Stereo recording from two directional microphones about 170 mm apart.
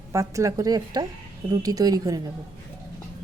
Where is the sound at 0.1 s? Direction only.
20° right (ahead or behind).